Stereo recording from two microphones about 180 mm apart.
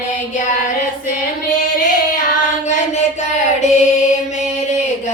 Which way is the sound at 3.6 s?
40° left (ahead or behind).